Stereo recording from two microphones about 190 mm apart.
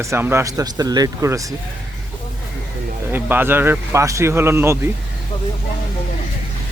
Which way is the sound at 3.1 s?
10° right (ahead or behind).